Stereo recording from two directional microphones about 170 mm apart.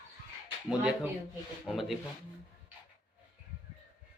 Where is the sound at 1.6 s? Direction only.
Centre (ahead or behind).